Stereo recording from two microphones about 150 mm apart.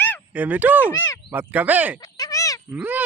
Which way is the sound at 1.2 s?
10° right (ahead or behind).